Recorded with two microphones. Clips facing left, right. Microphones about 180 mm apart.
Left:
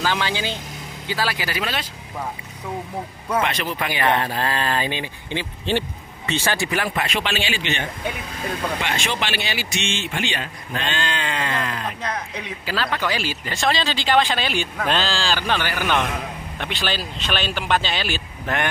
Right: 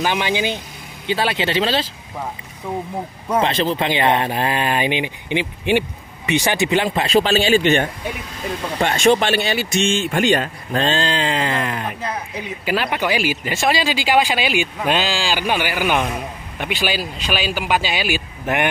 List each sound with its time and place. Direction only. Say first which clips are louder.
0.0 s speech: right 4 dB; 15° right (ahead or behind)
3.3 s speech: right 5 dB; 30° right (ahead or behind)